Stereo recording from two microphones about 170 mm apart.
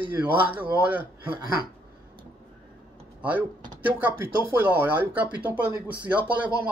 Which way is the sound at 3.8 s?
10° right (ahead or behind).